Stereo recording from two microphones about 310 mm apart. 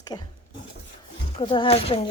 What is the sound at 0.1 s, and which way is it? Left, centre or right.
Speech, centre.